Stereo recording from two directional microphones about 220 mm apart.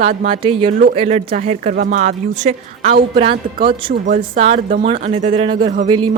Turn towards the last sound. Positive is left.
turn(degrees=-20)  # may be behind; listen again after turning